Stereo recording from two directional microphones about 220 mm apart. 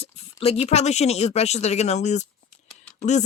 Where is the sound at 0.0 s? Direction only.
25° left (ahead or behind).